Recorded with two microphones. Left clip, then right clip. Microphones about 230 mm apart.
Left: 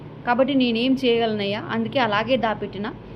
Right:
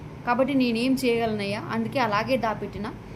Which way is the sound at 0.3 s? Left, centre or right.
Centre.